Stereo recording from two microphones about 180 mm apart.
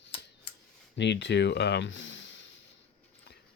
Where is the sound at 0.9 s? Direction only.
75° left (ahead or behind).